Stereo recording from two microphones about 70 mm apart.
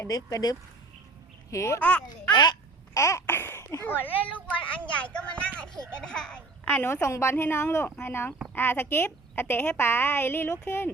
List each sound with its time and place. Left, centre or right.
0.1 s speech: left
1.5 s speech: left
1.8 s a child's voice: centre
2.3 s speech: left
2.9 s babbling: left
3.2 s laughter: left
3.8 s a child's voice: left
6.8 s a woman's voice: left